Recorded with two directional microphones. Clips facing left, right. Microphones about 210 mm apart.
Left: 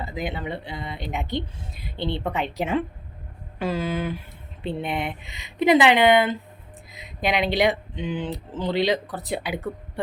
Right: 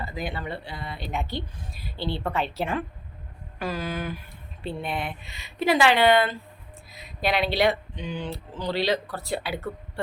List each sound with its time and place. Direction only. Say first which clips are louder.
0.0 s speech: left 3 dB; 20° left (ahead or behind)